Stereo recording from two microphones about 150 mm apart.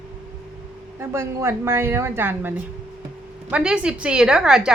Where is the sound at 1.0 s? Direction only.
20° right (ahead or behind).